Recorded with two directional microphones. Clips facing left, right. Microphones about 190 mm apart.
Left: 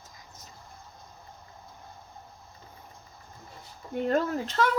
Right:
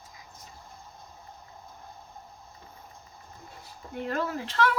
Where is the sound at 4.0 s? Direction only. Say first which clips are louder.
Left 5 dB; 35° left (ahead or behind).